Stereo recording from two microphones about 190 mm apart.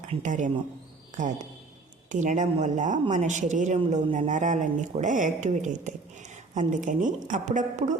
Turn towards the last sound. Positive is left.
turn(degrees=-40)  # may be behind; listen again after turning